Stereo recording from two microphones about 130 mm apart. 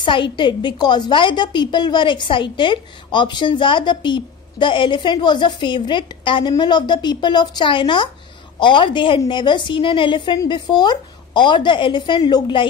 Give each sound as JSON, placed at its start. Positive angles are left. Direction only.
{"t": 0.0, "sound": "a woman's voice", "side_deg": 40}